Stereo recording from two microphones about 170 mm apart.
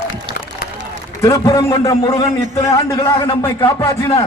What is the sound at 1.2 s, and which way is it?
A man's voice, 20° left (ahead or behind).